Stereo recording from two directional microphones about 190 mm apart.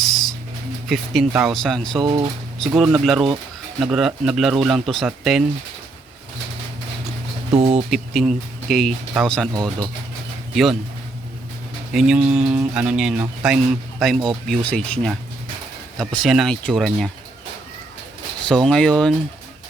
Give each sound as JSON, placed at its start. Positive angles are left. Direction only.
{"t": 0.0, "sound": "a sound", "side_deg": 0}
{"t": 0.9, "sound": "speech", "side_deg": 0}
{"t": 1.6, "sound": "speech", "side_deg": 0}
{"t": 7.5, "sound": "speech", "side_deg": -30}
{"t": 7.9, "sound": "speech", "side_deg": -5}
{"t": 9.5, "sound": "speech", "side_deg": -20}
{"t": 10.5, "sound": "speech", "side_deg": 0}
{"t": 11.9, "sound": "speech", "side_deg": -5}
{"t": 18.4, "sound": "speech", "side_deg": 5}